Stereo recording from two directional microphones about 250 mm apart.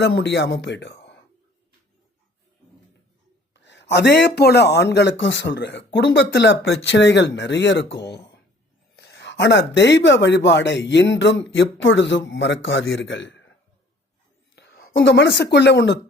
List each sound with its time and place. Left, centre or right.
0.0 s speech: left
3.5 s speech: left
14.5 s a sound: left
15.5 s speech: left